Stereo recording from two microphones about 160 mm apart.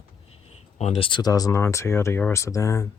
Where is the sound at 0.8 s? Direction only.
40° left (ahead or behind).